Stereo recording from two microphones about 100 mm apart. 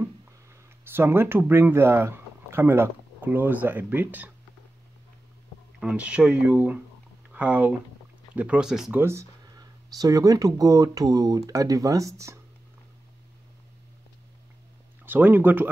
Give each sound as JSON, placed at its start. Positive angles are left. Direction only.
{"t": 0.9, "sound": "speech", "side_deg": -25}
{"t": 5.8, "sound": "speech", "side_deg": -10}
{"t": 8.9, "sound": "speech", "side_deg": -25}
{"t": 15.0, "sound": "speech", "side_deg": -20}